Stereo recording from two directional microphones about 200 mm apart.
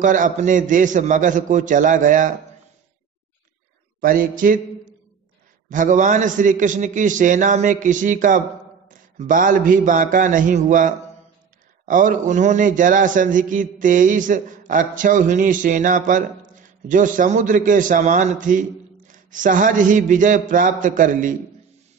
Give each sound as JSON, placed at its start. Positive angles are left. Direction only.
{"t": 0.0, "sound": "a man's voice", "side_deg": -40}
{"t": 4.0, "sound": "a sound", "side_deg": -45}
{"t": 5.7, "sound": "a man's voice", "side_deg": -40}